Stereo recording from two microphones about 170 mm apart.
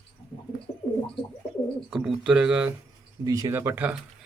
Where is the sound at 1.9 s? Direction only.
5° right (ahead or behind).